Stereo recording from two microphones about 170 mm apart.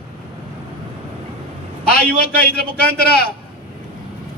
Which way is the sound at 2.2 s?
65° left (ahead or behind).